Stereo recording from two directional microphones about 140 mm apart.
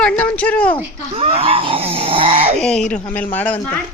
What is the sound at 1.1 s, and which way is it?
Speech, 45° right (ahead or behind).